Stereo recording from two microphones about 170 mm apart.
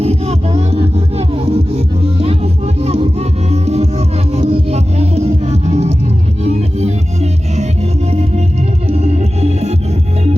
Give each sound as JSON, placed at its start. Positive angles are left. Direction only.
{"t": 0.0, "sound": "music", "side_deg": -35}
{"t": 8.9, "sound": "music", "side_deg": -40}